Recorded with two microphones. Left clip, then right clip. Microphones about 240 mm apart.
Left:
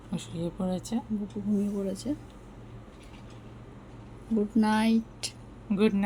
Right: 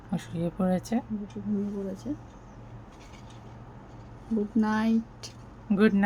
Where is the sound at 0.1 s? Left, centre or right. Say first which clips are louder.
Right 2 dB; right.